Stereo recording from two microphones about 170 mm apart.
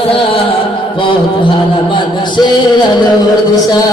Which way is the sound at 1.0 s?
30° left (ahead or behind).